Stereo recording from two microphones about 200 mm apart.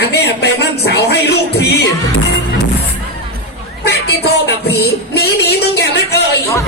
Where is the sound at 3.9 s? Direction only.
55° left (ahead or behind).